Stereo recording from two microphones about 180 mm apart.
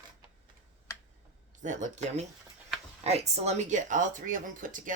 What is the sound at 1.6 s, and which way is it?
Speech, 45° right (ahead or behind).